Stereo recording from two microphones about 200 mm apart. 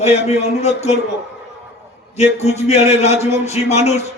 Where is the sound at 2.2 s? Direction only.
35° left (ahead or behind).